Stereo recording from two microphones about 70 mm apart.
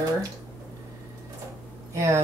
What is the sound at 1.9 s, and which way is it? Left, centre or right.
Speech, right.